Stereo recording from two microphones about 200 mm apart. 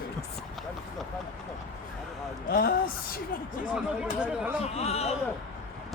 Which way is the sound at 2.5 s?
50° left (ahead or behind).